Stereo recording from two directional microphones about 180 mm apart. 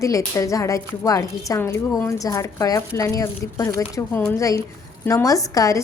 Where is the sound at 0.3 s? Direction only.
15° left (ahead or behind).